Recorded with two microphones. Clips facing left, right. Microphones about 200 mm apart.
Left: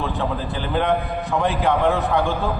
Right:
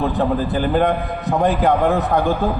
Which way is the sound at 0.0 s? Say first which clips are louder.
Right 6 dB; 40° right (ahead or behind).